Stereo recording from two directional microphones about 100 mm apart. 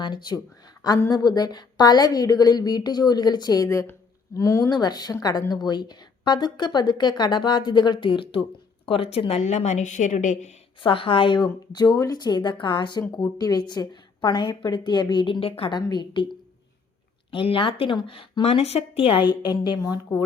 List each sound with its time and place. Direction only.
0.0 s a woman's voice: 45° left (ahead or behind)
3.7 s a woman's voice: 30° left (ahead or behind)
4.7 s a woman's voice: 45° left (ahead or behind); by 8.4 s 65° left (ahead or behind)
8.9 s speech: 80° left
10.8 s a woman's voice: 60° left (ahead or behind)
13.2 s a woman's voice: 40° left (ahead or behind); by 15.7 s 70° left (ahead or behind)
15.7 s a woman's voice: 45° left (ahead or behind)
17.3 s speech: 60° left (ahead or behind); by 19.1 s 80° left
19.2 s a woman's voice: 45° left (ahead or behind)